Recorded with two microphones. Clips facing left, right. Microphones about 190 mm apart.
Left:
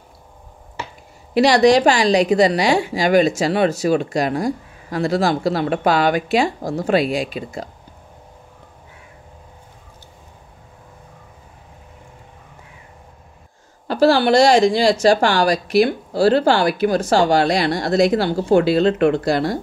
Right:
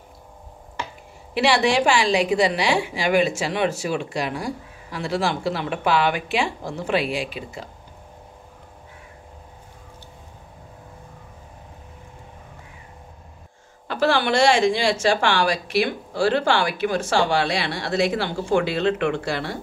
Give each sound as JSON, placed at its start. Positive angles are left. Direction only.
{"t": 1.3, "sound": "a woman's voice", "side_deg": 40}
{"t": 13.8, "sound": "a woman's voice", "side_deg": 35}